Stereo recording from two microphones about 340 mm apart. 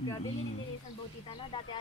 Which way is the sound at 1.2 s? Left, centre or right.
Centre.